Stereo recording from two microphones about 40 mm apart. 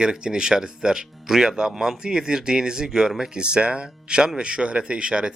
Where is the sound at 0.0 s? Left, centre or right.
Centre.